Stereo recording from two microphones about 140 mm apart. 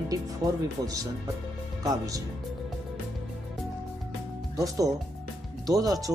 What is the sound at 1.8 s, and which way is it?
Speech, 25° right (ahead or behind).